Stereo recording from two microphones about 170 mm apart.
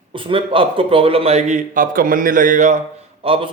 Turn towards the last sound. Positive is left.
turn(degrees=-30)  # may be behind; listen again after turning